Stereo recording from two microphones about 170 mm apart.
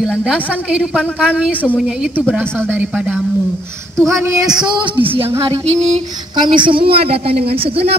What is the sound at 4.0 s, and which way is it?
Speech, 20° right (ahead or behind).